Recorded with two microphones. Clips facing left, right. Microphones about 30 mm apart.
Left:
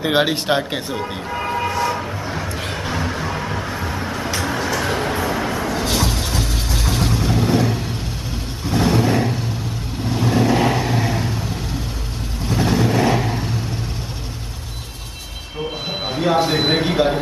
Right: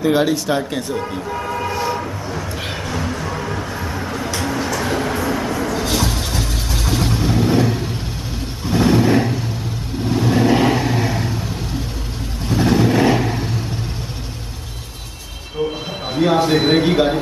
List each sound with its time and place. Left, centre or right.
0.0 s speech: left
0.6 s speech: left
1.3 s vehicle: left
1.7 s vehicle: centre
2.8 s music: centre
4.4 s music: left
5.3 s vehicle: centre
12.4 s vehicle: centre
16.1 s a sound: centre
16.4 s speech: centre